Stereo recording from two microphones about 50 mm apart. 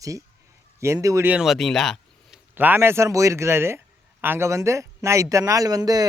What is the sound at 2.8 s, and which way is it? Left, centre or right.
Speech, right.